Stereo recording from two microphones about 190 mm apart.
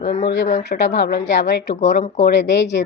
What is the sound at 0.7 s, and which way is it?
A woman's voice, 65° left (ahead or behind).